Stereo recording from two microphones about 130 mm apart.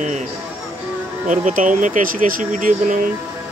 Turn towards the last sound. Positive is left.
turn(degrees=-85)